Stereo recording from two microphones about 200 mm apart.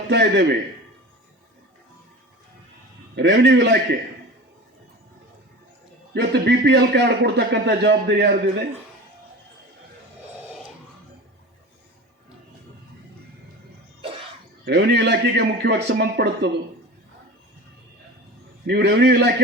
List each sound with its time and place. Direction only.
0.1 s a man's voice: 55° right (ahead or behind)
3.2 s a man's voice: 60° right (ahead or behind)
6.1 s a man's voice: 60° right (ahead or behind)
14.6 s a man's voice: 55° right (ahead or behind)
18.6 s a man's voice: 55° right (ahead or behind)